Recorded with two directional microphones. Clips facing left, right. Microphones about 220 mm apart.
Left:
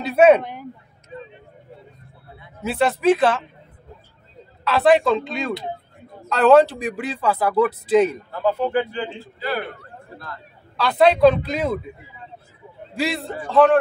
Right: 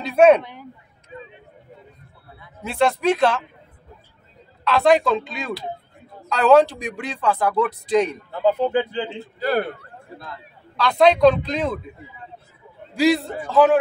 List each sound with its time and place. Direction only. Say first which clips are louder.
0.0 s a sound: even; 5° left (ahead or behind)
0.4 s speech: left 4 dB; 50° left (ahead or behind)
2.6 s speech: left 1 dB; 5° left (ahead or behind)
4.6 s speech: left 1 dB; 5° left (ahead or behind)
8.3 s a man's voice: right 2 dB; 20° right (ahead or behind)
9.4 s a man's voice: right 5 dB; 45° right (ahead or behind)
10.8 s speech: even; 5° left (ahead or behind)
12.9 s speech: right 7 dB; centre (ahead or behind)